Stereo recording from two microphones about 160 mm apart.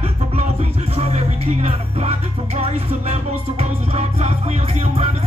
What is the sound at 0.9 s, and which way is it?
Music, 40° right (ahead or behind).